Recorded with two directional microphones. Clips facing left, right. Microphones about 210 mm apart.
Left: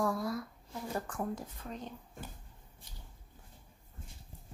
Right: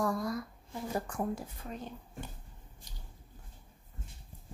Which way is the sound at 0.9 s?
15° right (ahead or behind).